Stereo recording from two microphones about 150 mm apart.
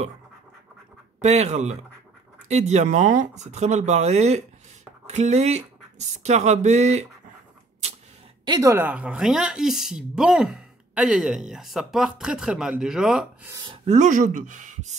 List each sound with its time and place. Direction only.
1.2 s speech: 45° right (ahead or behind)
8.5 s speech: 25° right (ahead or behind)
8.7 s speech: 10° right (ahead or behind)
13.8 s speech: 55° right (ahead or behind)